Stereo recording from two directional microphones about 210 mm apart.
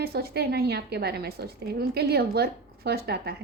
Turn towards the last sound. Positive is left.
turn(degrees=-50)  # may be behind; listen again after turning